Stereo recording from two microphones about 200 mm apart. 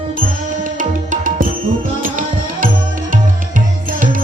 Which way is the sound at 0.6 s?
40° right (ahead or behind).